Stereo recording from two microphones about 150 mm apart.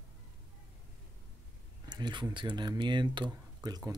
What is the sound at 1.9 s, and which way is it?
Speech, 30° right (ahead or behind).